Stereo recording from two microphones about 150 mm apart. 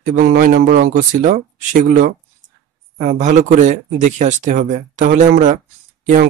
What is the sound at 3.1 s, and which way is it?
Speech, 55° right (ahead or behind).